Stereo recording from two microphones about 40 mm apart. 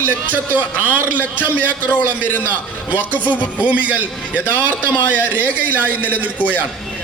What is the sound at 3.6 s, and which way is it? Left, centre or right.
A man's voice, right.